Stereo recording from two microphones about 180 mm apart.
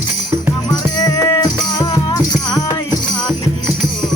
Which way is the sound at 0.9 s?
20° left (ahead or behind).